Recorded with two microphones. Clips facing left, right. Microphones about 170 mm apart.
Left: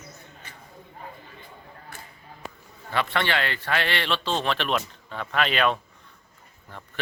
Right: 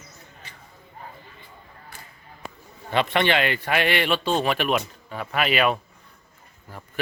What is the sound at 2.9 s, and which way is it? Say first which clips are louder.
A man's voice: right 4 dB; 20° right (ahead or behind).